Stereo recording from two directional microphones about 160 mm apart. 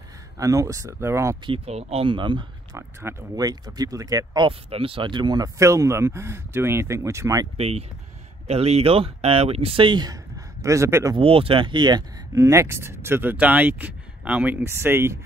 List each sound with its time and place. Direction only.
0.4 s speech: 20° right (ahead or behind)
1.4 s speech: 35° right (ahead or behind)
3.0 s speech: 20° right (ahead or behind)
7.5 s speech: 40° right (ahead or behind)
10.6 s speech: 20° right (ahead or behind)
11.1 s speech: 35° right (ahead or behind); by 15.1 s 15° right (ahead or behind)